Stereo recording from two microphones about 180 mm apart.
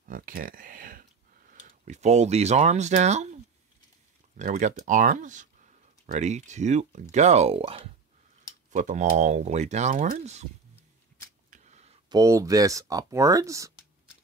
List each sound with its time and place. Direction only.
0.1 s speech: 55° right (ahead or behind)
4.4 s speech: 40° right (ahead or behind)
11.5 s a sound: 40° right (ahead or behind)
12.1 s speech: 20° right (ahead or behind)